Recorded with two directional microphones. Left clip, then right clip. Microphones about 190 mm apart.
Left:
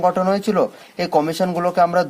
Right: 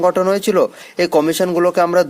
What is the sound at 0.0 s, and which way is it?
Speech, 45° right (ahead or behind).